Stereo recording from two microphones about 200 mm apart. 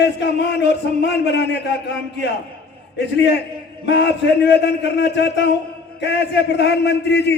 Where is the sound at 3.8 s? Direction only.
60° left (ahead or behind).